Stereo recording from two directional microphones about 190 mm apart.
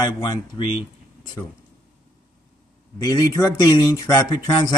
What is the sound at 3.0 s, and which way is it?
Speech, 20° left (ahead or behind).